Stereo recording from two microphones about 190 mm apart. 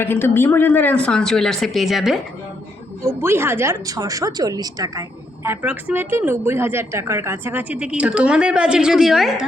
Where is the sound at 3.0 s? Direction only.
15° right (ahead or behind).